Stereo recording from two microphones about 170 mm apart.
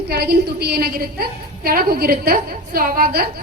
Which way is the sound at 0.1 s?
70° right (ahead or behind).